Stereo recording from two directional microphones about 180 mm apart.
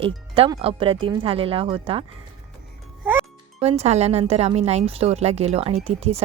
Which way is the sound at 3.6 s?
35° right (ahead or behind).